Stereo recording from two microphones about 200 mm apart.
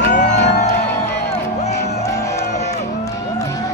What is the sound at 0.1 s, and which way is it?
Music, 35° left (ahead or behind).